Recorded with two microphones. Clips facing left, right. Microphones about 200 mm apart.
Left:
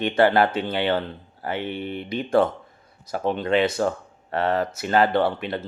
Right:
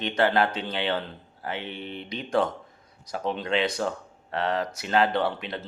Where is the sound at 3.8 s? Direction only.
55° left (ahead or behind).